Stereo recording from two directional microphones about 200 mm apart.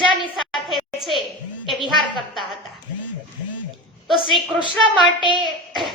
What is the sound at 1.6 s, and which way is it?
Speech, centre (ahead or behind).